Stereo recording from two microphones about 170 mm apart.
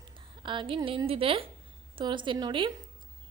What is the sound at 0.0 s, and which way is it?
A woman's voice, 30° right (ahead or behind).